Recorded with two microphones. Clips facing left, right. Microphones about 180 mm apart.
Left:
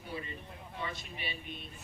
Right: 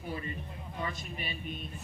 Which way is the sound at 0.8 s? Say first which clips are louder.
Right 3 dB; 45° right (ahead or behind).